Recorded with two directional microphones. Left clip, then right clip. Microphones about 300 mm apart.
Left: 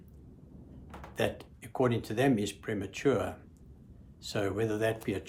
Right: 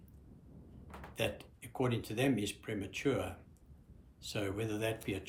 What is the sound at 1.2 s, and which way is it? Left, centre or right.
Speech, centre.